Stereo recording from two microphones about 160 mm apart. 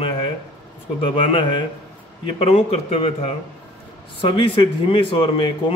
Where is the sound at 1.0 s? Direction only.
35° left (ahead or behind).